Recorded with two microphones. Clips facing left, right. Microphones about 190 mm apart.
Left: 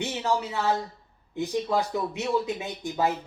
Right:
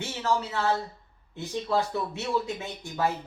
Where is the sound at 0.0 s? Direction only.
15° left (ahead or behind).